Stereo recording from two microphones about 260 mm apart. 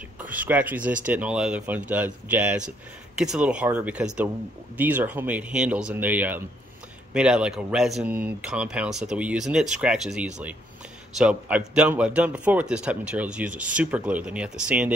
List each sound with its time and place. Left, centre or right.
0.2 s speech: centre